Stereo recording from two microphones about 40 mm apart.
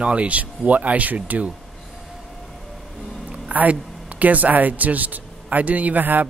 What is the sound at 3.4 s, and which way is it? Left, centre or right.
Speech, right.